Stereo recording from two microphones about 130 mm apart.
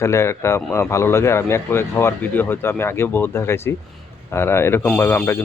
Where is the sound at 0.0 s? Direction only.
20° left (ahead or behind).